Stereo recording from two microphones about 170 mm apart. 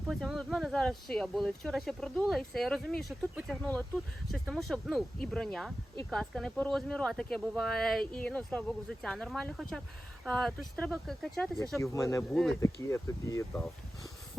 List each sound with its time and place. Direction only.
0.1 s speech: centre (ahead or behind)
11.8 s speech: 20° left (ahead or behind)
12.3 s speech: centre (ahead or behind)
12.5 s speech: 15° left (ahead or behind)